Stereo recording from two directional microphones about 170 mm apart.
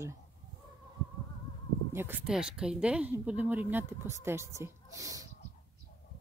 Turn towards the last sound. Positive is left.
turn(degrees=-20)  # may be behind; listen again after turning